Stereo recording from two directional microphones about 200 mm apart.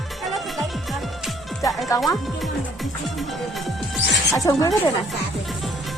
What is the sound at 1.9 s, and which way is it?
Speech, 15° left (ahead or behind).